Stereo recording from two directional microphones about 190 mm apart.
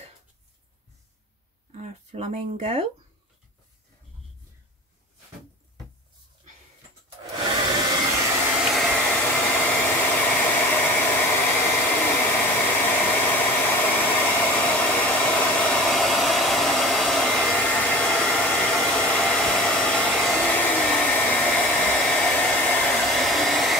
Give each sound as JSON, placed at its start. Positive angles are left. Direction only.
{"t": 1.7, "sound": "speech", "side_deg": -35}
{"t": 8.7, "sound": "hair dryer", "side_deg": 5}